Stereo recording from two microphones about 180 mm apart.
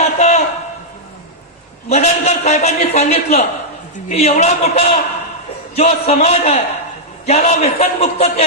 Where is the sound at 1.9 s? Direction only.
40° left (ahead or behind).